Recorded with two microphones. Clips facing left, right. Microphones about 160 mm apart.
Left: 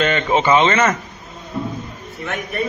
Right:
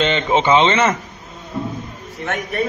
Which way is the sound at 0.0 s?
25° right (ahead or behind).